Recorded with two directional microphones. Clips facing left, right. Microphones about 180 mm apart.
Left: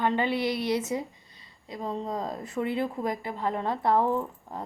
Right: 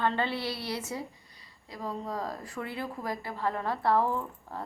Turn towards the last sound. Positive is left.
turn(degrees=20)  # may be behind; listen again after turning